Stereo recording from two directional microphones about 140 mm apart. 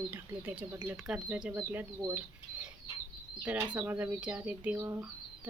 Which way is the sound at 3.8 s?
15° right (ahead or behind).